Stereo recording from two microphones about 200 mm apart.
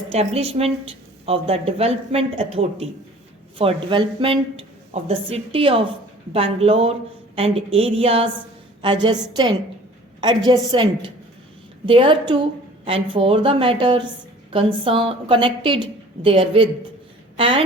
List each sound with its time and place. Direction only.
0.1 s a woman's voice: 30° right (ahead or behind)
11.9 s a woman's voice: 25° right (ahead or behind)